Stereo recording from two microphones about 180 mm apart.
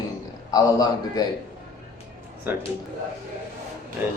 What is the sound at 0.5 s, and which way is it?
Speech, 20° left (ahead or behind).